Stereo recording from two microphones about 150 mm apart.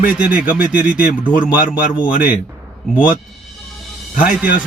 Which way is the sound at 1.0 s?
65° left (ahead or behind).